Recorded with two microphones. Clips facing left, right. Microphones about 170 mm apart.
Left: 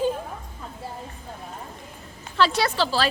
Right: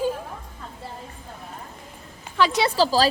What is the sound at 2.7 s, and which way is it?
Speech, 40° right (ahead or behind).